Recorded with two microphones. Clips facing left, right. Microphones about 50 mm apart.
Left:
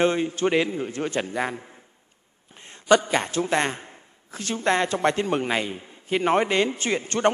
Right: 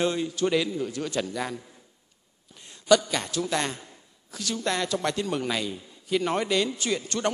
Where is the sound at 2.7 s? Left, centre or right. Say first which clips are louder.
Left 2 dB; left.